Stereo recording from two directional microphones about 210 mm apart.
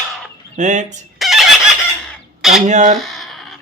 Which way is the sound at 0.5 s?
35° right (ahead or behind).